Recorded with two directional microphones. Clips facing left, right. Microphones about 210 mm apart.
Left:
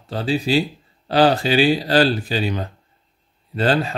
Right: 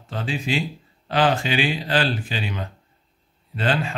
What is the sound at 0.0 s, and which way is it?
Speech, 35° left (ahead or behind).